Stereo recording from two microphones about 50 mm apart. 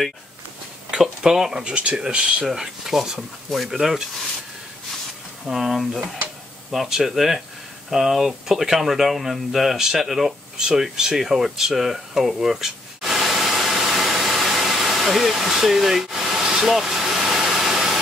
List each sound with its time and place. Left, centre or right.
0.9 s speech: centre
2.4 s speech: centre
5.5 s speech: centre
7.9 s a sound: centre